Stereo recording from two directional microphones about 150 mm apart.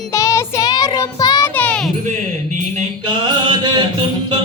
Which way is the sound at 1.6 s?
5° left (ahead or behind).